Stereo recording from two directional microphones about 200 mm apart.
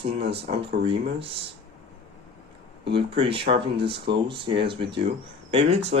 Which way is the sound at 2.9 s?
25° right (ahead or behind).